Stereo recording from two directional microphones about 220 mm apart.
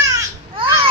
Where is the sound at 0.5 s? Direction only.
25° right (ahead or behind).